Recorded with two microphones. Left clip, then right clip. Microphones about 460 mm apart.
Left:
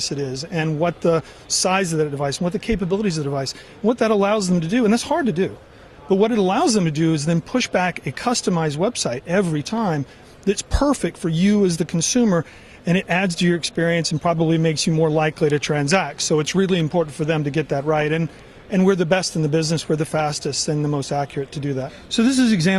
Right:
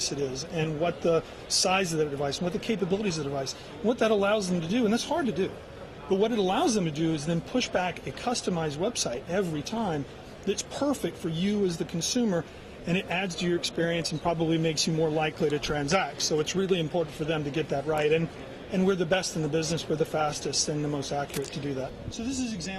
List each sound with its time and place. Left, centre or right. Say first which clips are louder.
0.5 s speech: left 8 dB; left